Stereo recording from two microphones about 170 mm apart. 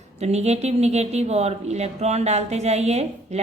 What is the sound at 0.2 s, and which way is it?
A woman's voice, 40° right (ahead or behind).